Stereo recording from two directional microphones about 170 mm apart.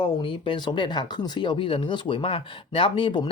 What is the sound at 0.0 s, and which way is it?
Speech, 30° left (ahead or behind).